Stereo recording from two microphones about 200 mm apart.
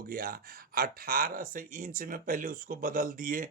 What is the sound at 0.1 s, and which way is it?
Speech, 50° right (ahead or behind).